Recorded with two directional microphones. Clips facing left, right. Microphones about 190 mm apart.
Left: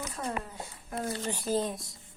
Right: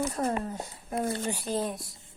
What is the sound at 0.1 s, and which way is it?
Speech, 45° right (ahead or behind).